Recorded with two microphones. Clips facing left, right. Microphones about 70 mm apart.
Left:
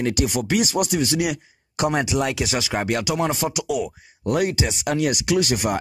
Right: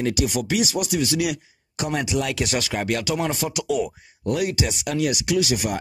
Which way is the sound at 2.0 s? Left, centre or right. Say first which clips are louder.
Right 1 dB; left.